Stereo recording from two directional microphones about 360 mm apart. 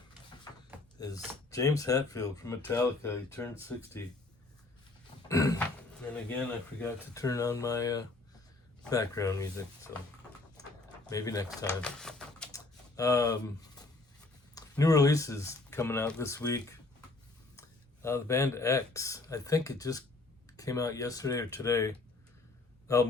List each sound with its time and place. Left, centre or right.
0.9 s speech: centre
5.3 s speech: centre
6.7 s speech: centre
11.0 s typewriter: centre
14.5 s speech: centre